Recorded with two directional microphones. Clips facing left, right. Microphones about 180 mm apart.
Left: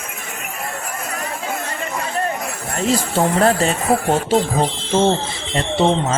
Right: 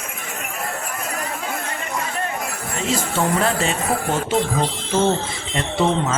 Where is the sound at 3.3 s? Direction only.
40° left (ahead or behind).